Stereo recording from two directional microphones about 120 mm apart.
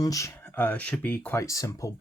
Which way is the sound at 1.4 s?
30° left (ahead or behind).